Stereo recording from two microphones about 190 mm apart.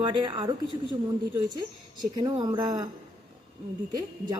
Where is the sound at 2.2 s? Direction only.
25° right (ahead or behind).